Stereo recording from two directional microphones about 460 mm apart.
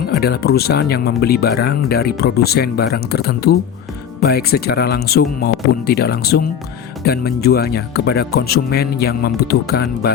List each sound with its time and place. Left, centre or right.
0.2 s speech: centre